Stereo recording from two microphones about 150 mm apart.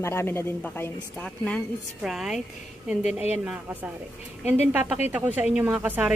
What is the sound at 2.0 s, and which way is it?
Speech, 5° right (ahead or behind).